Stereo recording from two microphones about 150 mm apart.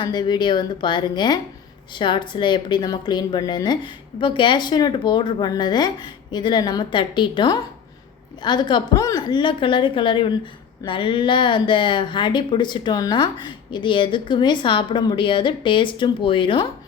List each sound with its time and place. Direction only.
0.0 s speech: 30° left (ahead or behind)